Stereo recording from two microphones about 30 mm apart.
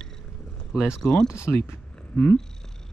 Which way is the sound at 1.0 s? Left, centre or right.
Left.